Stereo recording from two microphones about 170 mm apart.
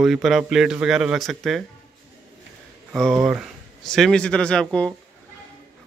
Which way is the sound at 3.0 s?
Centre (ahead or behind).